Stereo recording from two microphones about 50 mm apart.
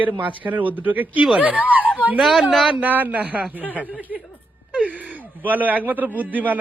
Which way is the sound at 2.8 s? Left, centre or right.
Right.